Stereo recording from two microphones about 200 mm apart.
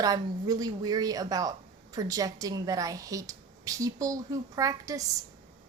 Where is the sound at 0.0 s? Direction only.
20° right (ahead or behind).